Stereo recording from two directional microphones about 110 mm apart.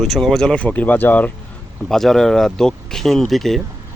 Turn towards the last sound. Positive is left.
turn(degrees=0)  # may be behind; listen again after turning